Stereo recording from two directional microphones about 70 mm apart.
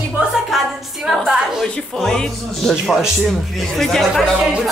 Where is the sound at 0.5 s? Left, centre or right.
Centre.